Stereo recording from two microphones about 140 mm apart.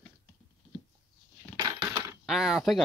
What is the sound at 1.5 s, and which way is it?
Crushing, 25° right (ahead or behind).